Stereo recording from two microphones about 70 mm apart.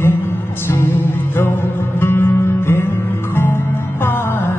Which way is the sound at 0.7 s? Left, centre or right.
Left.